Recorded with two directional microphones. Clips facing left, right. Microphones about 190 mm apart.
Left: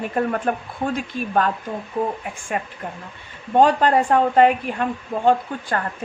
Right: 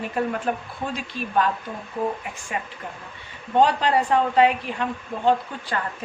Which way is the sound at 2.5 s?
50° left (ahead or behind).